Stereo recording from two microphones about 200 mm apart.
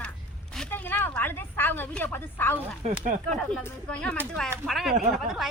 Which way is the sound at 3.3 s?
5° left (ahead or behind).